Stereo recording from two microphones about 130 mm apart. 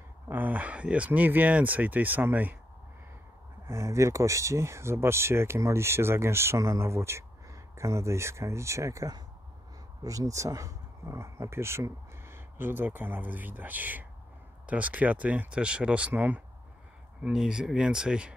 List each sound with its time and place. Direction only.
0.3 s speech: 15° right (ahead or behind)
3.6 s speech: 20° right (ahead or behind)